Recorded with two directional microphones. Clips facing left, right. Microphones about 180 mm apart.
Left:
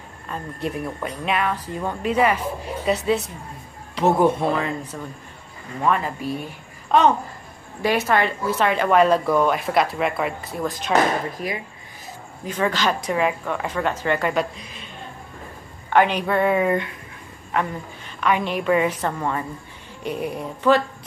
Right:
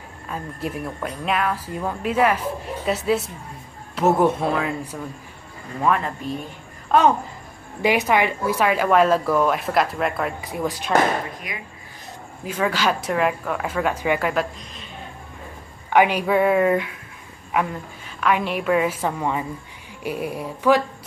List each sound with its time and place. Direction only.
0.3 s a child's voice: centre (ahead or behind)
10.4 s speech: 15° right (ahead or behind)
11.5 s speech: 30° left (ahead or behind)
12.4 s speech: 5° right (ahead or behind)
15.9 s speech: 10° right (ahead or behind)